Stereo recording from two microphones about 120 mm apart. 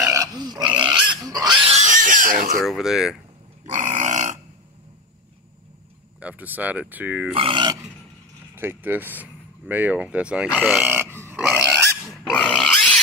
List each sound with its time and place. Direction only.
0.0 s pig: 25° right (ahead or behind)
0.6 s pig: 40° right (ahead or behind)
1.7 s pig: 80° right
2.3 s speech: centre (ahead or behind)
3.7 s a sound: 90° right
6.1 s speech: 10° right (ahead or behind)
7.3 s grunt: 50° right (ahead or behind)
8.5 s speech: 15° right (ahead or behind)
10.5 s speech: centre (ahead or behind)
11.6 s dog: centre (ahead or behind)
12.3 s pig: 10° left (ahead or behind)